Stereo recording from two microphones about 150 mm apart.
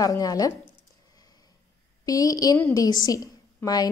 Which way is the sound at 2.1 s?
25° left (ahead or behind).